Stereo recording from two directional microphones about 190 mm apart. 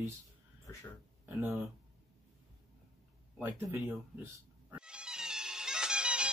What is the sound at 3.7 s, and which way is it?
Music, 10° right (ahead or behind).